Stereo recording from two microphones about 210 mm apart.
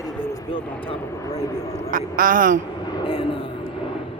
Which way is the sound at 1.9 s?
40° right (ahead or behind).